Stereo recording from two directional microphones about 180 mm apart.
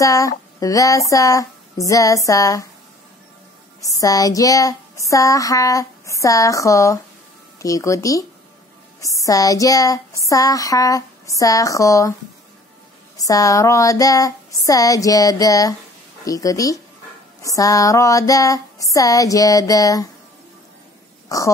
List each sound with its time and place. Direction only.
0.0 s child singing: 20° left (ahead or behind)
3.8 s child singing: 20° left (ahead or behind)
7.6 s speech: 15° left (ahead or behind)
9.0 s child singing: 20° left (ahead or behind)
13.2 s child singing: 20° left (ahead or behind)